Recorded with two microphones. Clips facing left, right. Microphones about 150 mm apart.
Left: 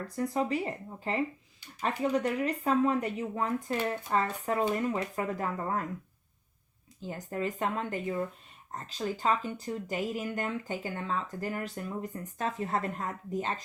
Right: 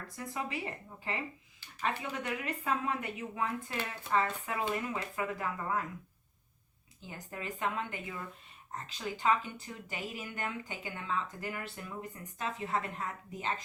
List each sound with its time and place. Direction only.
0.3 s speech: 40° left (ahead or behind)
7.1 s speech: 40° left (ahead or behind)